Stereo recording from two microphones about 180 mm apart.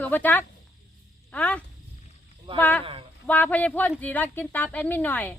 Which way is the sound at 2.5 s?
30° right (ahead or behind).